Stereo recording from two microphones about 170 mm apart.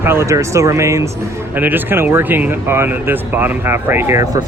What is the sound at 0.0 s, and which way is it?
Speech, 15° right (ahead or behind).